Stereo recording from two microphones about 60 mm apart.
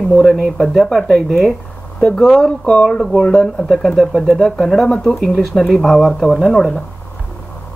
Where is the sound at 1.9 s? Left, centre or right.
Centre.